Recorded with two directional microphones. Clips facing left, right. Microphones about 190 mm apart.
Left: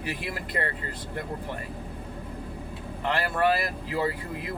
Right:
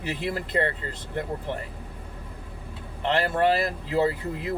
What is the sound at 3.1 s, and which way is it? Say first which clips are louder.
Speech: right 2 dB; 25° right (ahead or behind).